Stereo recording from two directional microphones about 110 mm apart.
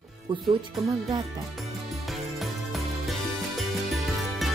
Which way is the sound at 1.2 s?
Centre (ahead or behind).